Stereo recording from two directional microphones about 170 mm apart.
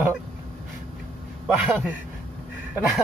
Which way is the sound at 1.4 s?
5° right (ahead or behind).